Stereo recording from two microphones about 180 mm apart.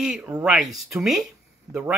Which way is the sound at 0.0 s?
5° right (ahead or behind).